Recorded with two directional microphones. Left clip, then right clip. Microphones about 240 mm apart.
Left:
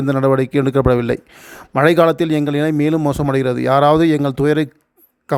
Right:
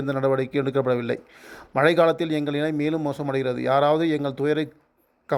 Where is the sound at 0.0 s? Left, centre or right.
Left.